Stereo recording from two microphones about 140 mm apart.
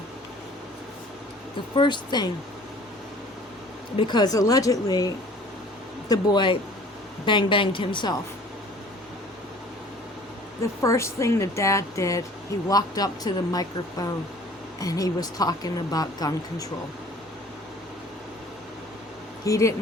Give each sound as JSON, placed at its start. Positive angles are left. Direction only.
{"t": 1.7, "sound": "a woman's voice", "side_deg": 35}
{"t": 3.9, "sound": "a woman's voice", "side_deg": 35}
{"t": 10.8, "sound": "a woman's voice", "side_deg": 20}
{"t": 19.5, "sound": "a woman's voice", "side_deg": 20}